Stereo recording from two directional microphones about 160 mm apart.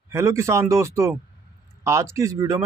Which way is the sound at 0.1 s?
15° right (ahead or behind).